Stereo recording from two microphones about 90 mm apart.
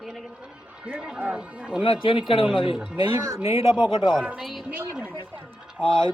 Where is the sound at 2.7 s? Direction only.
10° right (ahead or behind).